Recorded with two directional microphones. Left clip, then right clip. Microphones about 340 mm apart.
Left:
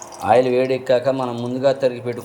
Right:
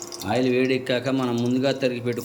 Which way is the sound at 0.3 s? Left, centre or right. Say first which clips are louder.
Left 7 dB; centre.